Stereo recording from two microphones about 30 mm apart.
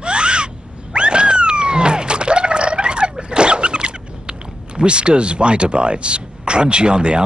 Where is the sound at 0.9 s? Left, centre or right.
Right.